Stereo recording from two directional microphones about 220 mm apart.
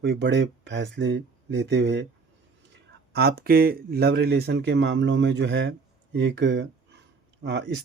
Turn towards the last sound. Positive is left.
turn(degrees=-50)  # may be behind; listen again after turning